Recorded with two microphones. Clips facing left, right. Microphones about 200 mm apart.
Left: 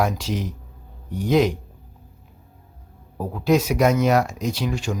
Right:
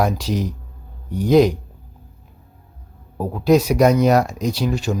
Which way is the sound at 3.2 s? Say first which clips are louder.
Right 4 dB; 40° right (ahead or behind).